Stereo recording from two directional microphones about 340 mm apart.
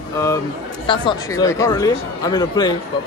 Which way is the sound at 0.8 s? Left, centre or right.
Centre.